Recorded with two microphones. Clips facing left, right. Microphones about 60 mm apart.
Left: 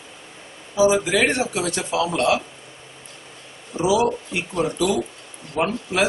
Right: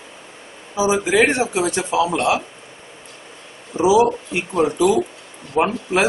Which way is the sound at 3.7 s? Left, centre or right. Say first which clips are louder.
Right 5 dB; right.